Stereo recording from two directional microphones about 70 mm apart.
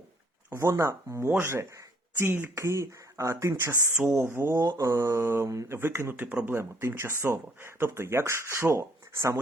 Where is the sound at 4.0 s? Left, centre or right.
Right.